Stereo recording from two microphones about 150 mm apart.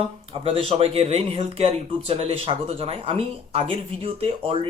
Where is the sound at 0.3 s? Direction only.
40° right (ahead or behind).